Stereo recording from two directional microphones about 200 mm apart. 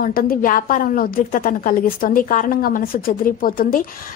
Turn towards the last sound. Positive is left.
turn(degrees=45)  # may be behind; listen again after turning